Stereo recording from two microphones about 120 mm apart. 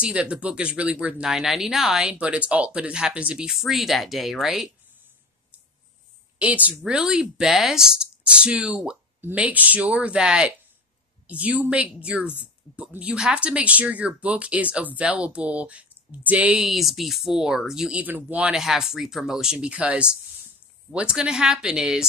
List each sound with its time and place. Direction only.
0.0 s speech: 10° right (ahead or behind)
6.3 s a woman's voice: 10° right (ahead or behind)